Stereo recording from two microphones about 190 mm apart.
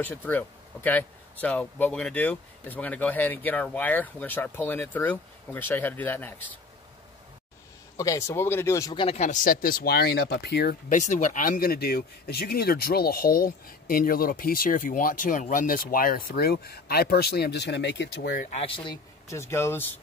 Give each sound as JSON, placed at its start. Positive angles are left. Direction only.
{"t": 0.0, "sound": "speech", "side_deg": 10}
{"t": 8.0, "sound": "speech", "side_deg": 15}
{"t": 9.0, "sound": "speech", "side_deg": 35}
{"t": 18.5, "sound": "speech", "side_deg": 30}
{"t": 19.2, "sound": "speech", "side_deg": 15}